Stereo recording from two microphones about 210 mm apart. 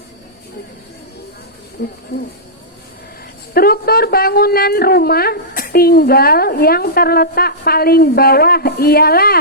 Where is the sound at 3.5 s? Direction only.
45° left (ahead or behind).